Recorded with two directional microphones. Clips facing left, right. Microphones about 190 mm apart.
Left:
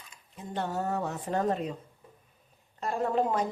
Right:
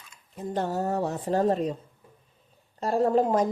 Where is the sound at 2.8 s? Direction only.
35° right (ahead or behind).